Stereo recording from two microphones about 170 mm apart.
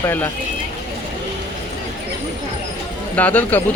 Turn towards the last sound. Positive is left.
turn(degrees=10)  # may be behind; listen again after turning